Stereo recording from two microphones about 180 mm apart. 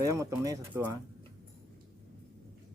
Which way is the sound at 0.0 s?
15° right (ahead or behind).